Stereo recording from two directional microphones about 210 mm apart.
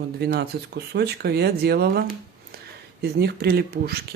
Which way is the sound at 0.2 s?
50° right (ahead or behind).